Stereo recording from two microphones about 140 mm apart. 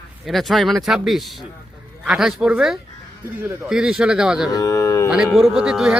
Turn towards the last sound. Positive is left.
turn(degrees=-5)  # may be behind; listen again after turning